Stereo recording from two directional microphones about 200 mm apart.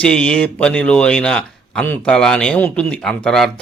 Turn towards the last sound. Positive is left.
turn(degrees=5)  # may be behind; listen again after turning